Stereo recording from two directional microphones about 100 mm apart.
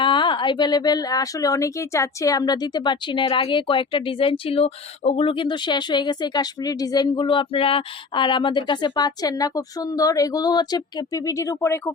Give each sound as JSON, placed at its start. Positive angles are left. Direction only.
{"t": 0.0, "sound": "a woman's voice", "side_deg": 55}